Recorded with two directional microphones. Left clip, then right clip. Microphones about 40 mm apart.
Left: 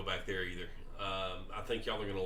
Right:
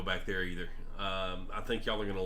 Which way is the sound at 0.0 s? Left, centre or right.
Right.